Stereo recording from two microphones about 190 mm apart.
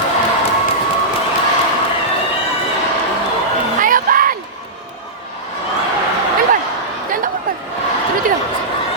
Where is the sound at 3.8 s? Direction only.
45° right (ahead or behind).